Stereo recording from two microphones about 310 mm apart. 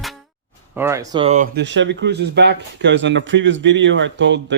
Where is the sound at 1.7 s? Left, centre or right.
Right.